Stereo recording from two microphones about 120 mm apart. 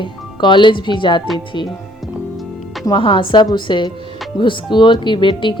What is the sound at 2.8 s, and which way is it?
A woman's voice, 45° left (ahead or behind).